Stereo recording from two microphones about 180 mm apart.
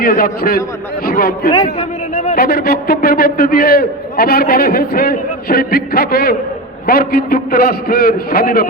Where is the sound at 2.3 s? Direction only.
60° left (ahead or behind).